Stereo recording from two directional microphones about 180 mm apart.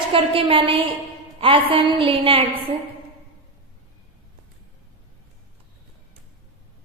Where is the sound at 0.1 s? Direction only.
30° right (ahead or behind).